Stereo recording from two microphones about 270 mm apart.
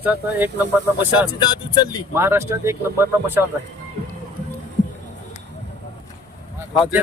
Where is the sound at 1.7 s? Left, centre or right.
Centre.